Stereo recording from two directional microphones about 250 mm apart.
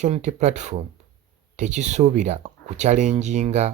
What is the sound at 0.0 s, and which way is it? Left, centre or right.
Speech, right.